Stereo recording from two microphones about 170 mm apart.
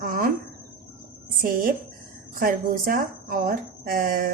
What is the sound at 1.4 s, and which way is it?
A woman's voice, 55° right (ahead or behind).